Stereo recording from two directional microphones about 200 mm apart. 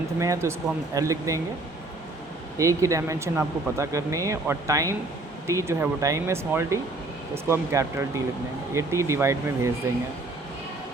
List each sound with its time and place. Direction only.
0.2 s speech: 15° right (ahead or behind)
2.6 s speech: 15° right (ahead or behind)